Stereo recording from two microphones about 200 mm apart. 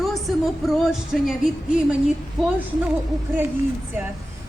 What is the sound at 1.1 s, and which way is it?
Speech, centre (ahead or behind).